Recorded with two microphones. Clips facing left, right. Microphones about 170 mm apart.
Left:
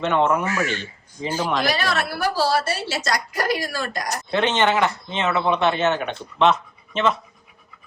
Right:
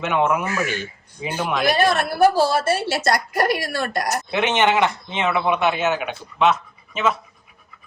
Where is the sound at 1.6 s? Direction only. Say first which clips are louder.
Right 5 dB; 55° right (ahead or behind).